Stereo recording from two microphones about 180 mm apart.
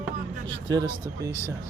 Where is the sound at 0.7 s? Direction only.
20° right (ahead or behind).